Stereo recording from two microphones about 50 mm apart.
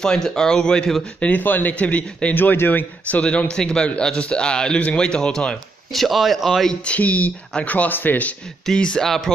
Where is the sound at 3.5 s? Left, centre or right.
Centre.